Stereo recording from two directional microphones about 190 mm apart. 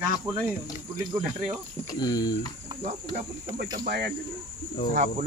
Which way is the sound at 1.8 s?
20° left (ahead or behind).